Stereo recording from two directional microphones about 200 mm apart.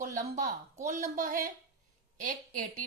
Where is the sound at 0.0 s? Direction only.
40° right (ahead or behind).